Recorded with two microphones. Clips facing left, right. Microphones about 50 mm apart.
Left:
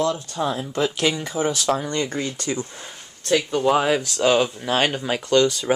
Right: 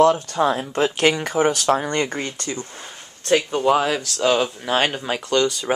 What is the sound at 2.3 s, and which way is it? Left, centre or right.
Speech, centre.